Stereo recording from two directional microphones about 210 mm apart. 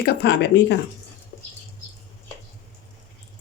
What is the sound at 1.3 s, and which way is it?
Bird flight, 40° left (ahead or behind).